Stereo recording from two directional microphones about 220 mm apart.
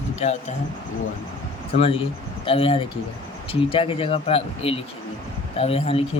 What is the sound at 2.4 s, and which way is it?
Speech, 25° left (ahead or behind).